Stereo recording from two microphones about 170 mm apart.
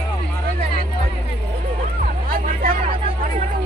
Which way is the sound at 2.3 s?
55° right (ahead or behind).